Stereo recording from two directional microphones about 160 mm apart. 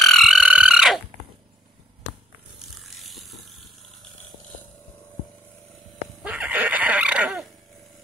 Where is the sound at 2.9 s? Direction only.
Centre (ahead or behind).